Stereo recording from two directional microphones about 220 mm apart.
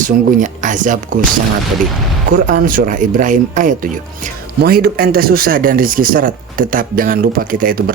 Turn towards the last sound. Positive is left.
turn(degrees=-40)  # may be behind; listen again after turning